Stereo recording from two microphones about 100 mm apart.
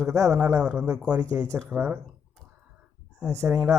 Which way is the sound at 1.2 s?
30° right (ahead or behind).